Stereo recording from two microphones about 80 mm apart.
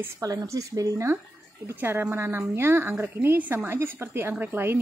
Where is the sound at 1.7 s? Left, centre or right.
Right.